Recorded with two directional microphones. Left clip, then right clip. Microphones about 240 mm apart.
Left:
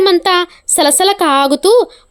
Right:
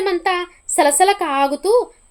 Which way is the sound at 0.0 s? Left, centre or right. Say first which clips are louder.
Left 8 dB; left.